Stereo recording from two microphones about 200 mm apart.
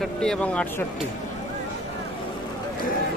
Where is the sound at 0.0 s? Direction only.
5° left (ahead or behind).